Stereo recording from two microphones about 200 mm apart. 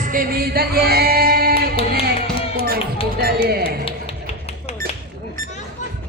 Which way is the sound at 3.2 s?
50° right (ahead or behind).